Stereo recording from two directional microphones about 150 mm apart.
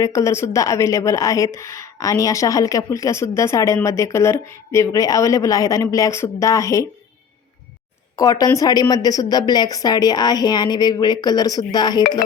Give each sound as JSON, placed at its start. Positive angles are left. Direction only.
{"t": 0.0, "sound": "speech", "side_deg": 20}
{"t": 8.1, "sound": "speech", "side_deg": 25}